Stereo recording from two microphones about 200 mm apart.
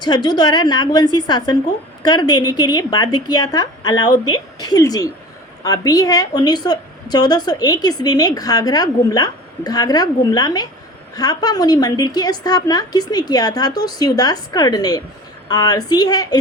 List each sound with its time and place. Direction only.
0.0 s a woman's voice: 20° left (ahead or behind)